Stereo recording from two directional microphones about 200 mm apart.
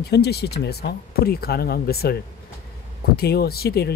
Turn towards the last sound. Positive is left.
turn(degrees=50)  # may be behind; listen again after turning